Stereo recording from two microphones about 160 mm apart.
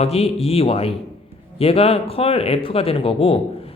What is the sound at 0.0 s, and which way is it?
Speech, 40° left (ahead or behind).